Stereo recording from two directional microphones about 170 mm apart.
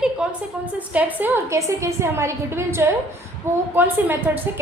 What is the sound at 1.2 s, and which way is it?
A woman's voice, 15° right (ahead or behind).